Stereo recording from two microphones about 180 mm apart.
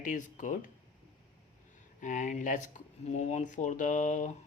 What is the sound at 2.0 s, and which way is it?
Speech, 45° left (ahead or behind).